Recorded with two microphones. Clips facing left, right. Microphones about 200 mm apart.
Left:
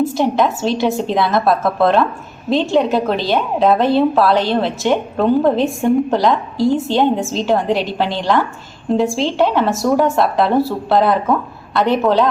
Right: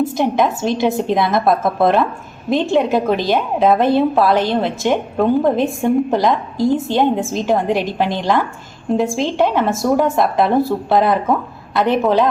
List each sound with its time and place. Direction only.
0.1 s a woman's voice: 15° right (ahead or behind)